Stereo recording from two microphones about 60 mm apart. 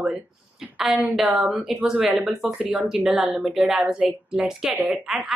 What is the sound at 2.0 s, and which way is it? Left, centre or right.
Speech, right.